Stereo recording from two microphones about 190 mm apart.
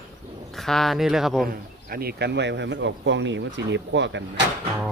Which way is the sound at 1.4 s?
50° right (ahead or behind).